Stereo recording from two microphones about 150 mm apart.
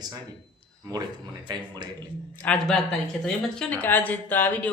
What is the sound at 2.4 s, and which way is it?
Speech, 5° left (ahead or behind).